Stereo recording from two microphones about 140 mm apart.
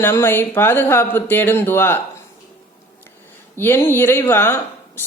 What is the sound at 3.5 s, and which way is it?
A woman's voice, 15° left (ahead or behind).